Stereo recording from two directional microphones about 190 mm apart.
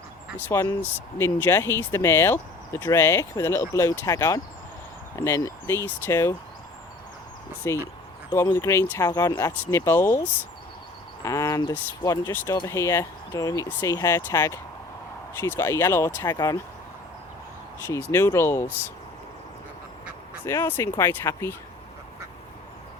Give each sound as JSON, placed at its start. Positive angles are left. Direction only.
{"t": 0.3, "sound": "speech", "side_deg": 10}
{"t": 7.6, "sound": "speech", "side_deg": 15}
{"t": 11.2, "sound": "speech", "side_deg": 15}
{"t": 18.1, "sound": "speech", "side_deg": 15}
{"t": 20.4, "sound": "speech", "side_deg": 10}